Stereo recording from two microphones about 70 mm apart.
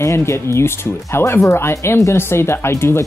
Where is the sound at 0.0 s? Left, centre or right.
Left.